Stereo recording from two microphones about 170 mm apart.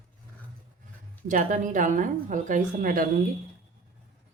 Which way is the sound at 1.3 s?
50° right (ahead or behind).